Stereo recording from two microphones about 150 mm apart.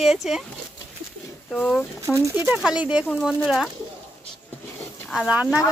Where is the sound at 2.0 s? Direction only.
15° right (ahead or behind); by 3.7 s centre (ahead or behind).